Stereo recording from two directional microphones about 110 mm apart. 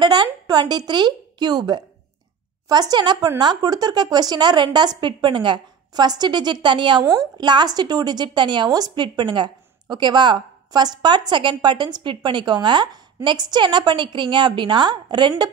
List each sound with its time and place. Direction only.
0.0 s a woman's voice: 40° right (ahead or behind)